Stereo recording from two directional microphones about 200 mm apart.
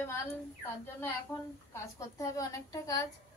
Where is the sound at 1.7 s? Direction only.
15° left (ahead or behind).